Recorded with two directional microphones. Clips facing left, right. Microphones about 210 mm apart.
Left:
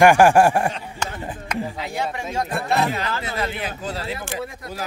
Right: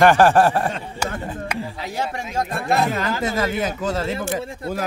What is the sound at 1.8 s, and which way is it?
A man's voice, 40° right (ahead or behind).